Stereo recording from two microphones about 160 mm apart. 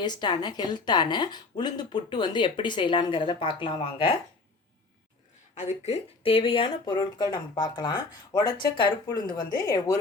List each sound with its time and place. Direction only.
0.0 s speech: 25° left (ahead or behind)
5.5 s speech: 45° left (ahead or behind); by 9.9 s 20° left (ahead or behind)